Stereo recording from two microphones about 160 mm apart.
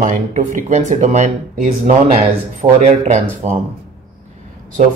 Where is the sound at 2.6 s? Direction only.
50° right (ahead or behind).